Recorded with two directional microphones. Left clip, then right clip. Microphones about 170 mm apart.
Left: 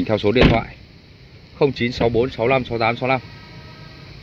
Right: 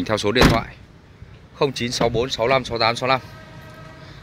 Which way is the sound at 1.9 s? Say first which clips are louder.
Left 2 dB; 10° right (ahead or behind).